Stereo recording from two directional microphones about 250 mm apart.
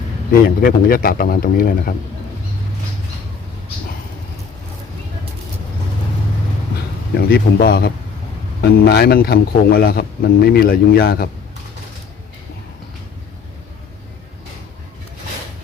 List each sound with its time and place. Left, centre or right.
0.4 s a man's voice: left
7.1 s a man's voice: left